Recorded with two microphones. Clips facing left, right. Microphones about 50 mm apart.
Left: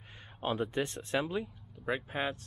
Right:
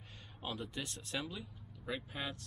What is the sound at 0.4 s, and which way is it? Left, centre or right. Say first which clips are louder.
Speech: left 10 dB; left.